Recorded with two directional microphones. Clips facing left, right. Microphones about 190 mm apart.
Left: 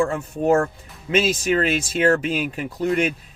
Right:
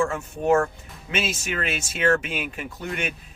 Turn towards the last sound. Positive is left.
turn(degrees=35)  # may be behind; listen again after turning